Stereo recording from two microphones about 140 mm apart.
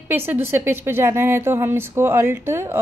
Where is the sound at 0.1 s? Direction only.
15° right (ahead or behind).